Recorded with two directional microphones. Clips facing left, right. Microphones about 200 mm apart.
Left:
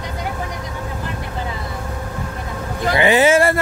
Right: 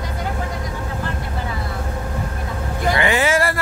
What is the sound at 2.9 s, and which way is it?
Speech, 20° left (ahead or behind).